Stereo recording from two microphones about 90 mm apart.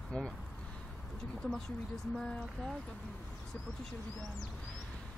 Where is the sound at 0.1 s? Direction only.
10° left (ahead or behind).